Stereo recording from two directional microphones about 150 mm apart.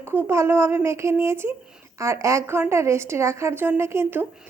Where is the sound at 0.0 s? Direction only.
15° right (ahead or behind).